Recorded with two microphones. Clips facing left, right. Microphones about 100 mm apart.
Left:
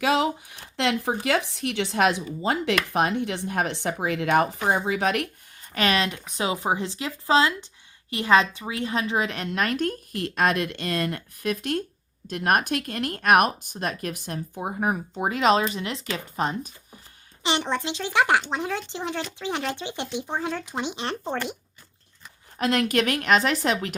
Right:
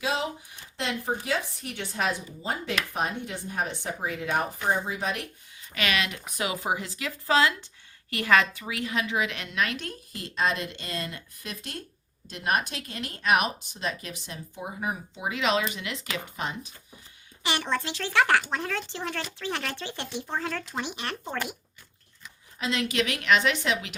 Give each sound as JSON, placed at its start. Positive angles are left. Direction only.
{"t": 0.0, "sound": "speech", "side_deg": 70}
{"t": 5.5, "sound": "speech", "side_deg": 40}
{"t": 17.4, "sound": "speech", "side_deg": 20}
{"t": 22.5, "sound": "speech", "side_deg": 55}